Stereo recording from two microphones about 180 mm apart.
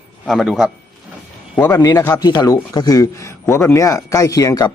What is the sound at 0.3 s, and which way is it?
Speech, centre (ahead or behind).